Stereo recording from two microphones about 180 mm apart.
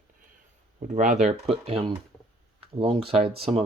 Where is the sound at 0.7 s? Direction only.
40° right (ahead or behind).